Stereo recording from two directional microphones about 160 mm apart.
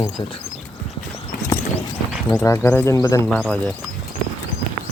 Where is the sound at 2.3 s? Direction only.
20° left (ahead or behind).